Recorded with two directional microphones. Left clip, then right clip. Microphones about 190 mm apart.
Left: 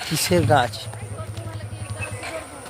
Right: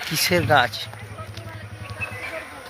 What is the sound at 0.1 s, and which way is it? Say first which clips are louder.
Speech: even; 10° right (ahead or behind).